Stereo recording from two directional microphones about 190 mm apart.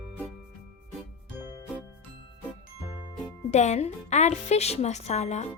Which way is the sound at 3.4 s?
35° left (ahead or behind).